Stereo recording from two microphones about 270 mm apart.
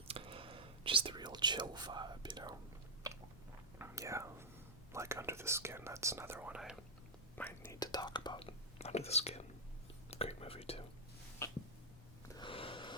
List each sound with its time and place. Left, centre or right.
0.1 s whispering: centre
3.8 s whispering: centre
7.3 s whispering: centre
12.3 s a sound: centre